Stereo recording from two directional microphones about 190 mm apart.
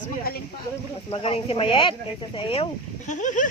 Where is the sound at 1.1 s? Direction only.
30° left (ahead or behind).